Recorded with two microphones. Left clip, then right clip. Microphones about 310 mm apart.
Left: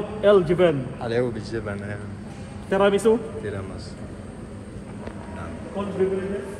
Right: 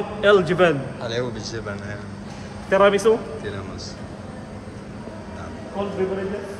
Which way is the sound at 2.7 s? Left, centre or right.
Left.